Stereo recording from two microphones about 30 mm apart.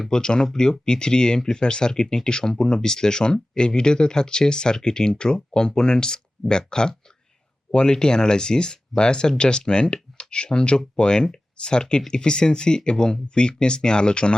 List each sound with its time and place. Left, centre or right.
0.1 s speech: left